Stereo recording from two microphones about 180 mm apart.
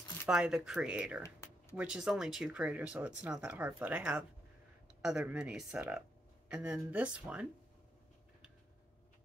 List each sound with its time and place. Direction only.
0.3 s speech: 5° right (ahead or behind)
1.2 s a sound: 15° left (ahead or behind)
1.8 s speech: 5° right (ahead or behind)